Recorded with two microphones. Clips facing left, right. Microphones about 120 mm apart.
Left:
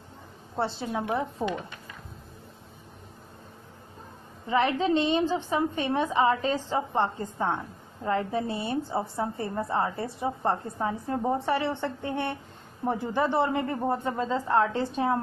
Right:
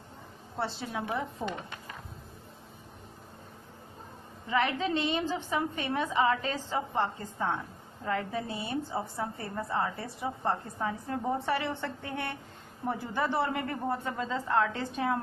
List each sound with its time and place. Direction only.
0.6 s a woman's voice: 30° left (ahead or behind)
4.5 s a woman's voice: 30° left (ahead or behind)